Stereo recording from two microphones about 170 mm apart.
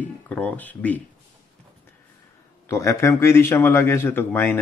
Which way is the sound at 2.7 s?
15° left (ahead or behind).